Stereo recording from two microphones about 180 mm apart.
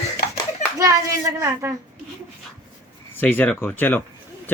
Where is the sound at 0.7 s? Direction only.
20° right (ahead or behind).